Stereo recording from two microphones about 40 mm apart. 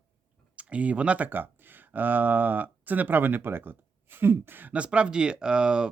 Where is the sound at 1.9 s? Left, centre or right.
Right.